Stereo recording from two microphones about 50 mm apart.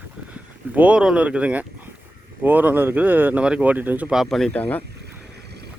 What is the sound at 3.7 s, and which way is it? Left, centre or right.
Speech, right.